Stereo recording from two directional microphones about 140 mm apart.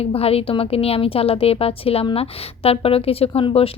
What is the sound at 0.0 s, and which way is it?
A woman's voice, 45° left (ahead or behind).